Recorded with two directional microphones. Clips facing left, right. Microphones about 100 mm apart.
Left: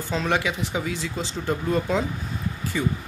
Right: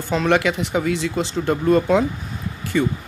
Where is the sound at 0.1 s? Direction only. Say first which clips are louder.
Right 6 dB; 75° right (ahead or behind).